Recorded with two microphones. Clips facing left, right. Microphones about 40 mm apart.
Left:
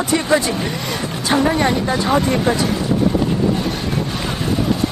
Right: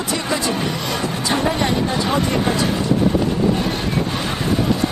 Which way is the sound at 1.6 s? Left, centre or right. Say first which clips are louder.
Left 2 dB; left.